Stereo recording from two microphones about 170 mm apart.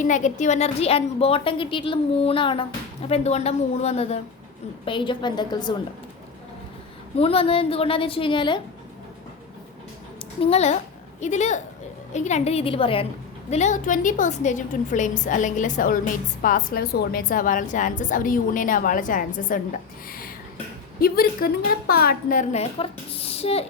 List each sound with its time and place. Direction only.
0.0 s a woman's voice: 45° left (ahead or behind); by 5.7 s 25° left (ahead or behind)
7.2 s a woman's voice: 35° left (ahead or behind)
10.4 s a woman's voice: 40° left (ahead or behind)
13.5 s a woman's voice: 45° left (ahead or behind)
20.1 s a sound: 60° left (ahead or behind)
21.0 s a woman's voice: 60° left (ahead or behind); by 23.6 s 35° left (ahead or behind)